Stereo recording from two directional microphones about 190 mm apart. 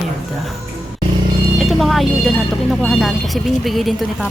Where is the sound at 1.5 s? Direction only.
Centre (ahead or behind).